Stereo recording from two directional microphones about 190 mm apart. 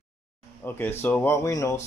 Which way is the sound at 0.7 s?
10° left (ahead or behind).